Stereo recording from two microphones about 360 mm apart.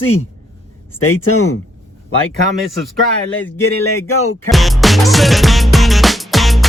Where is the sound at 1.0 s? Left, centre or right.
Left.